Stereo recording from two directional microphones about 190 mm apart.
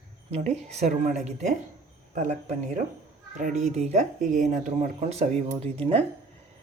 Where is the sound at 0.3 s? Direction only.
35° right (ahead or behind).